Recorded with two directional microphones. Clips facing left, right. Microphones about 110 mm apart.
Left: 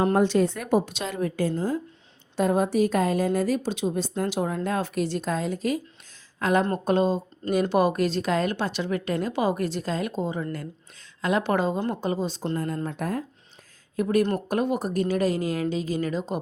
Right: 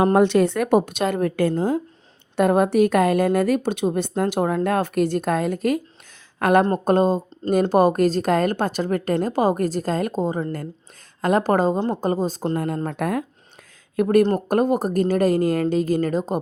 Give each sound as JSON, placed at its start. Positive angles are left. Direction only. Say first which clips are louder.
{"t": 0.0, "sound": "a woman's voice", "louder": "right 5 dB", "side_deg": -60}
{"t": 6.7, "sound": "a woman's voice", "louder": "right 5 dB", "side_deg": -45}
{"t": 13.0, "sound": "speech", "louder": "right 5 dB", "side_deg": -65}
{"t": 14.3, "sound": "speech", "louder": "right 6 dB", "side_deg": -45}